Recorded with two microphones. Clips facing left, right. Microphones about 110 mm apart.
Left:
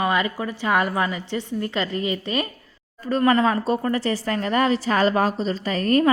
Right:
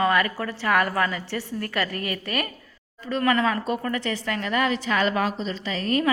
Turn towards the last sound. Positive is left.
turn(degrees=45)  # may be behind; listen again after turning